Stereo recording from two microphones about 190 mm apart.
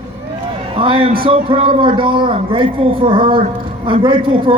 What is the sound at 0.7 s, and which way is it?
A man's voice, 30° right (ahead or behind).